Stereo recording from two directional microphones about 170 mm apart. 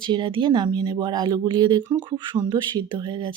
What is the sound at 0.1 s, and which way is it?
Speech, 30° right (ahead or behind).